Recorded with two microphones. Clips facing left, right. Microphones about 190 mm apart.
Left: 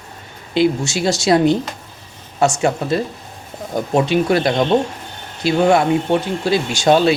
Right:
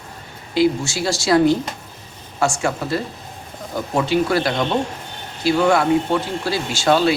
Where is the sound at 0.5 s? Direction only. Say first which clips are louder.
Left 1 dB; 20° left (ahead or behind).